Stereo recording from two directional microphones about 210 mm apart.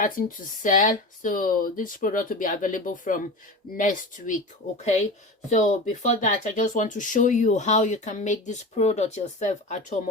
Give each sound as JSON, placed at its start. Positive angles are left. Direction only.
{"t": 0.0, "sound": "speech", "side_deg": 40}